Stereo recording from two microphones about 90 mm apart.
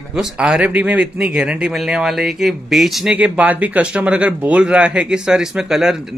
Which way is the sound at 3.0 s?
15° right (ahead or behind).